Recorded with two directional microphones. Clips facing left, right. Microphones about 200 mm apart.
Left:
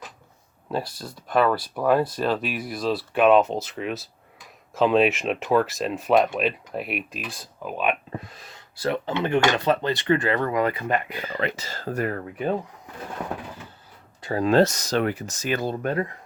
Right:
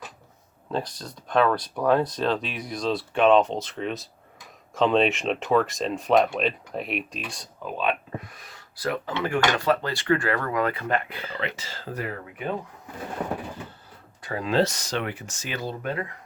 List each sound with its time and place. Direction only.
0.7 s speech: 5° left (ahead or behind)
11.3 s speech: 45° left (ahead or behind)
14.3 s speech: 45° left (ahead or behind)